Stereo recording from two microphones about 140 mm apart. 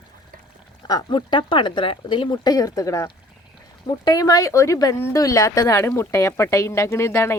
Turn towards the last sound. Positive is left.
turn(degrees=20)  # may be behind; listen again after turning